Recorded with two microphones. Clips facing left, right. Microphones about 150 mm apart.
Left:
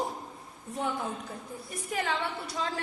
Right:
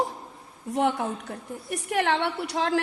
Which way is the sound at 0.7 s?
80° right.